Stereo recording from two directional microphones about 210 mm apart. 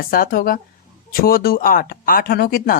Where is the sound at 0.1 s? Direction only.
45° left (ahead or behind).